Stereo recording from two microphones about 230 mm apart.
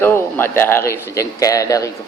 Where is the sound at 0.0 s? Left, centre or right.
Centre.